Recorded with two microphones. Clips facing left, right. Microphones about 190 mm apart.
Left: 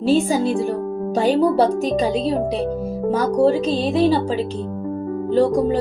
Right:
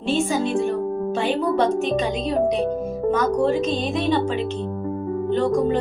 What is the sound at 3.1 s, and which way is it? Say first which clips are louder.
Speech: left 3 dB; 35° left (ahead or behind).